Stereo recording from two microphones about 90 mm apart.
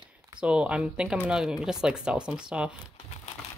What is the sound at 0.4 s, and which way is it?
Speech, 10° right (ahead or behind).